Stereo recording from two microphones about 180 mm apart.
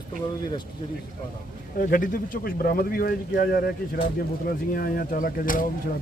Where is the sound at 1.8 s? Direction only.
50° left (ahead or behind).